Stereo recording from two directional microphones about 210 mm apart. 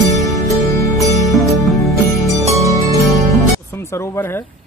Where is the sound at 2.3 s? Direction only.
15° right (ahead or behind).